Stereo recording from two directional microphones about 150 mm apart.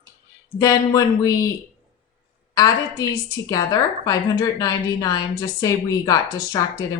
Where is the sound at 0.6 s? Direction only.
20° left (ahead or behind).